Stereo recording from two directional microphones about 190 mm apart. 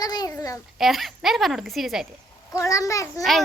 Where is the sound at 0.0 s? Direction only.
20° left (ahead or behind).